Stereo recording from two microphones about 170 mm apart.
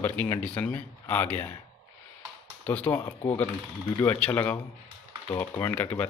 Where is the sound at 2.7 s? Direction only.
10° left (ahead or behind).